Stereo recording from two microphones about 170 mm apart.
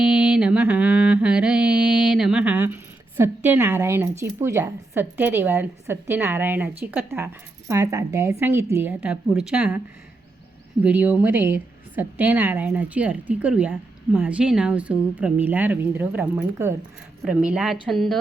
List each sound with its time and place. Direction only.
0.0 s mantra: 5° right (ahead or behind)
7.7 s a woman's voice: 20° right (ahead or behind)
10.8 s a woman's voice: 10° right (ahead or behind)